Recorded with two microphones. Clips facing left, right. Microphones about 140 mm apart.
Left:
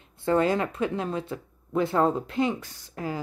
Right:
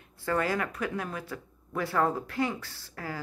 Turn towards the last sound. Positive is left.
turn(degrees=20)  # may be behind; listen again after turning